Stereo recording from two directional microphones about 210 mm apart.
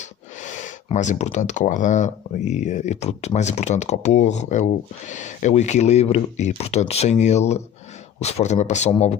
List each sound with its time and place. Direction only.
0.4 s speech: 35° left (ahead or behind)